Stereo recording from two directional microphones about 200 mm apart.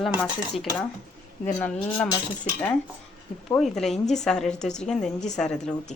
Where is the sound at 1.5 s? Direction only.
15° left (ahead or behind).